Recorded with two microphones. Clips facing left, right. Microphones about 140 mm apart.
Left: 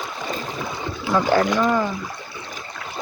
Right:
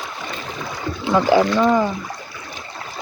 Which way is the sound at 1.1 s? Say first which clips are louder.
Right 3 dB; 10° right (ahead or behind).